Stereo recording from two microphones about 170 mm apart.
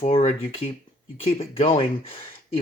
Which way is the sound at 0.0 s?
40° left (ahead or behind).